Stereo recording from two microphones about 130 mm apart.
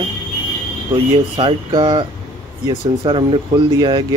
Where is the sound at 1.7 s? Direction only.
35° right (ahead or behind).